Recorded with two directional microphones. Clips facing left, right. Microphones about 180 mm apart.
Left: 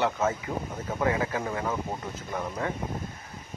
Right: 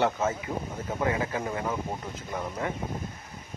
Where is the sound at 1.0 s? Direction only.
25° right (ahead or behind).